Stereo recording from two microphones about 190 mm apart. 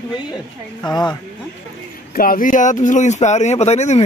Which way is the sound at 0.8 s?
20° left (ahead or behind).